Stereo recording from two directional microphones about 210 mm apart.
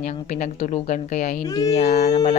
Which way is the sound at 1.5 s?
15° left (ahead or behind).